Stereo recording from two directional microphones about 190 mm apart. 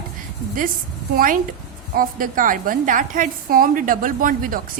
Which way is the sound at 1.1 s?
45° right (ahead or behind).